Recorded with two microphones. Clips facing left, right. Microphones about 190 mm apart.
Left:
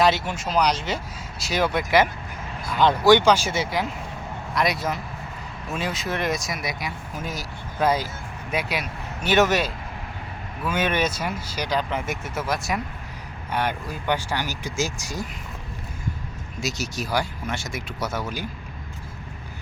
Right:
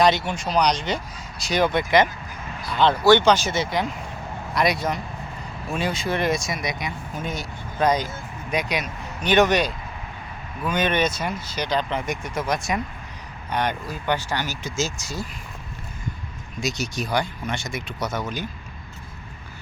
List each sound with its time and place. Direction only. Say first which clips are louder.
0.0 s speech: right 1 dB; 5° left (ahead or behind)
16.6 s speech: right 2 dB; 5° left (ahead or behind)